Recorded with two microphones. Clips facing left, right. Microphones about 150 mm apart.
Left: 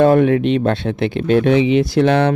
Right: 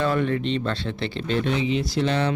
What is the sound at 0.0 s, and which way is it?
Speech, 55° left (ahead or behind).